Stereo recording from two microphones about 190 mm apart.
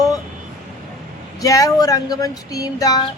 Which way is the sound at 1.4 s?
20° left (ahead or behind).